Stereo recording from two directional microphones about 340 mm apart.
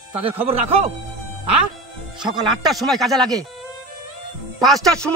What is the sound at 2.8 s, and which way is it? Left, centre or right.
Speech, centre.